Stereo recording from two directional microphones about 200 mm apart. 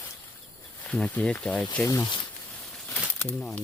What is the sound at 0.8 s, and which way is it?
Speech, 5° left (ahead or behind).